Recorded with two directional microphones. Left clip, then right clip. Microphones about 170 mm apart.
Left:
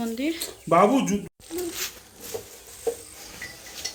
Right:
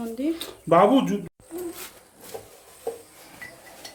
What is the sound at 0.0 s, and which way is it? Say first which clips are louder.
Speech: even; centre (ahead or behind).